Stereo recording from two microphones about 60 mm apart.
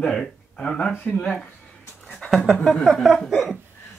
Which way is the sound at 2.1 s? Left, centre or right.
Centre.